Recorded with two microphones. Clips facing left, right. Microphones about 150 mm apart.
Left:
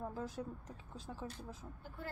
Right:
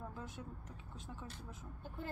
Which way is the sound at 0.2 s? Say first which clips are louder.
Left 6 dB; 35° left (ahead or behind).